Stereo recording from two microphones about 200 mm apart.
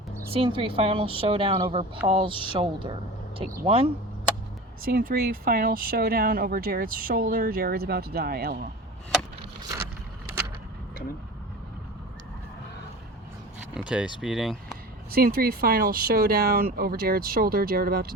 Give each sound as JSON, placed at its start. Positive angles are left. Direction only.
{"t": 0.3, "sound": "speech", "side_deg": -25}
{"t": 4.8, "sound": "speech", "side_deg": -50}
{"t": 13.7, "sound": "speech", "side_deg": -5}
{"t": 15.1, "sound": "speech", "side_deg": -50}